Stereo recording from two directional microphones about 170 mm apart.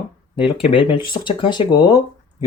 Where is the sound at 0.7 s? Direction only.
30° left (ahead or behind).